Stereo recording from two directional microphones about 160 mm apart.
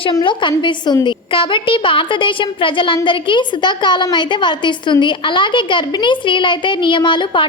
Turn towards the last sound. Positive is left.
turn(degrees=30)  # may be behind; listen again after turning